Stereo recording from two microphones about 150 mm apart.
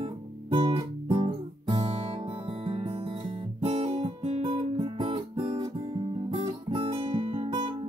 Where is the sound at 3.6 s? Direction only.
40° right (ahead or behind).